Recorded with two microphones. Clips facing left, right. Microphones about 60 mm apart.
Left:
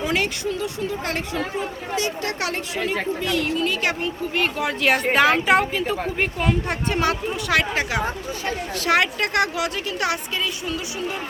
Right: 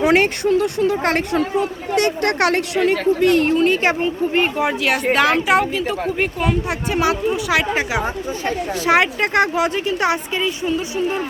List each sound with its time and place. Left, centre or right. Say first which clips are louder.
0.0 s a woman's voice: right 8 dB; right
3.2 s speech: right 8 dB; right
4.4 s speech: right 5 dB; centre
4.8 s speech: left 1 dB; centre; by 11.2 s right